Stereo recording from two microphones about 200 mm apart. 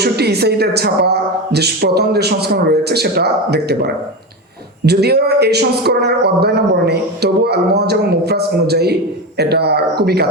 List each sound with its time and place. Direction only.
0.0 s a man's voice: 55° right (ahead or behind)
4.9 s a man's voice: 55° right (ahead or behind)